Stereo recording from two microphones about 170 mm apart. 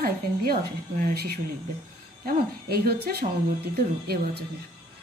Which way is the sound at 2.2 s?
65° right (ahead or behind).